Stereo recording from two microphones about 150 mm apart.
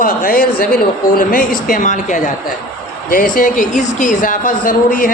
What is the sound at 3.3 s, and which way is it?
A man's voice, 60° left (ahead or behind).